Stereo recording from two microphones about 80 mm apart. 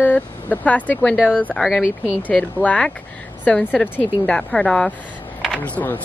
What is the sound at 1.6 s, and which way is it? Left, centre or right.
Speech, centre.